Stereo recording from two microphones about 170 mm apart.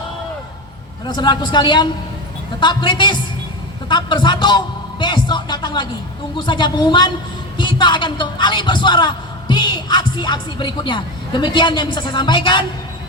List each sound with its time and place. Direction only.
1.0 s a man's voice: 25° left (ahead or behind)